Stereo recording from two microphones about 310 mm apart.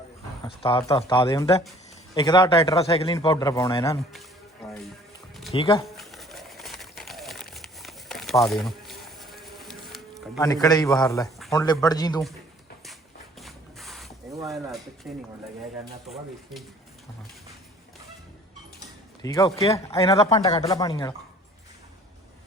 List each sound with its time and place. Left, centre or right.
0.4 s a man's voice: centre
5.5 s a man's voice: centre
6.0 s pigeon: centre
7.5 s a sound: centre
10.4 s a man's voice: centre
13.4 s spray: centre
14.3 s a sound: centre
14.5 s speech: centre
19.2 s a man's voice: centre